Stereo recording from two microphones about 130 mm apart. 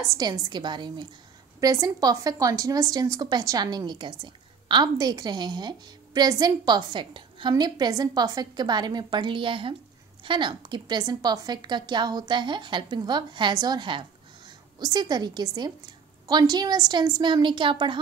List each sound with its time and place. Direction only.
0.2 s a woman's voice: 35° right (ahead or behind)